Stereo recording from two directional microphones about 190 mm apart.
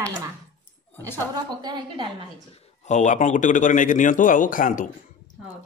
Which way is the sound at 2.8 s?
40° left (ahead or behind).